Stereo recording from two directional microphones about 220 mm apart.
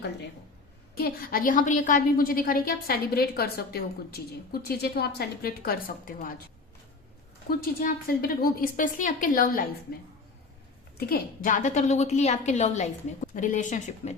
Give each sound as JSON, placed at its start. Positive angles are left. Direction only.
{"t": 0.9, "sound": "a woman's voice", "side_deg": 40}
{"t": 7.6, "sound": "a woman's voice", "side_deg": 40}
{"t": 10.9, "sound": "a woman's voice", "side_deg": 45}